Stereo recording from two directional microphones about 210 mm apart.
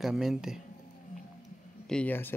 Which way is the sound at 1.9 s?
5° left (ahead or behind).